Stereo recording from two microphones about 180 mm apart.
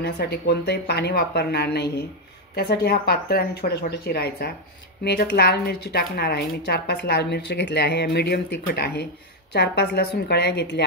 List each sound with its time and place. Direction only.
0.0 s a woman's voice: 65° left (ahead or behind)